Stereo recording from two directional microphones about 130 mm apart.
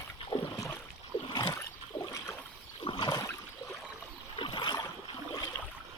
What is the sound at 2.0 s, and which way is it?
Toilet flush, 20° left (ahead or behind).